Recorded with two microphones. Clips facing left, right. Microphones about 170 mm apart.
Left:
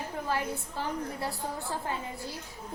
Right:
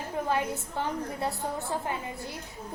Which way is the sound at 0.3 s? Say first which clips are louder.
Right 2 dB; 20° right (ahead or behind).